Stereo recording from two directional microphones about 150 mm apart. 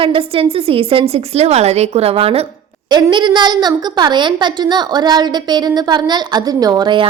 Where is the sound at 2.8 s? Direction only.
30° right (ahead or behind).